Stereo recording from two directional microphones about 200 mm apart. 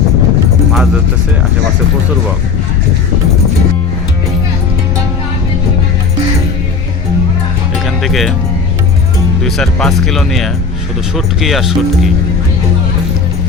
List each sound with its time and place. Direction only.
7.9 s music: centre (ahead or behind)
9.4 s speech: 5° left (ahead or behind)